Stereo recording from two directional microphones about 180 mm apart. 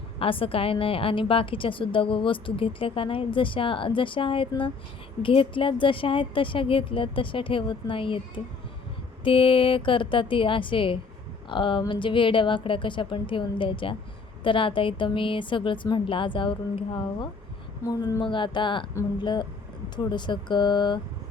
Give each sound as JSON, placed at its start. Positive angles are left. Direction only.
{"t": 0.2, "sound": "a woman's voice", "side_deg": 30}
{"t": 9.2, "sound": "a woman's voice", "side_deg": 30}